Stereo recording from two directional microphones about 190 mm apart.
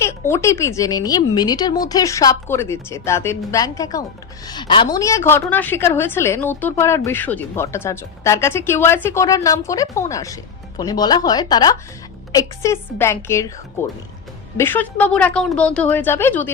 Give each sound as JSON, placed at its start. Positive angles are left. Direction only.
{"t": 0.0, "sound": "a woman's voice", "side_deg": 15}